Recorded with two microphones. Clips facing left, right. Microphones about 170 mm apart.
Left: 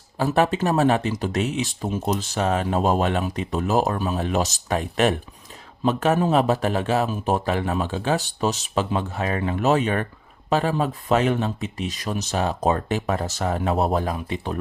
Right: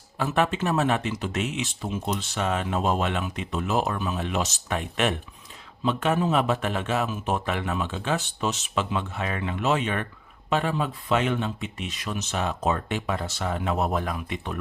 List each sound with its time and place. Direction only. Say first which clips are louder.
0.2 s speech: left 4 dB; 35° left (ahead or behind)